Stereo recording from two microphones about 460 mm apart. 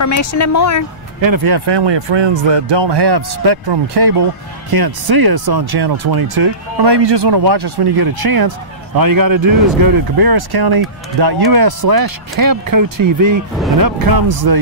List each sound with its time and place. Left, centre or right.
0.0 s speech: left
1.2 s speech: right